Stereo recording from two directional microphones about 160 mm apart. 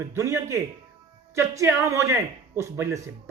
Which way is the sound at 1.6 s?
20° right (ahead or behind).